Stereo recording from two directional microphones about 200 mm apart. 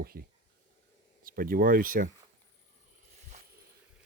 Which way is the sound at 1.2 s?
45° right (ahead or behind).